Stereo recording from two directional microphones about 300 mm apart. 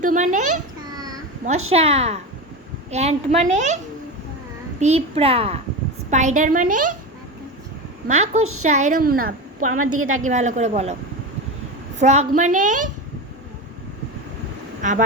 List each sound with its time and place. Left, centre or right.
0.0 s a woman's voice: right
0.9 s a sound: centre
1.7 s a woman's voice: centre
4.8 s a woman's voice: right
8.0 s a woman's voice: right
9.8 s a woman's voice: right
10.2 s a woman's voice: right
11.9 s a woman's voice: right
14.8 s speech: right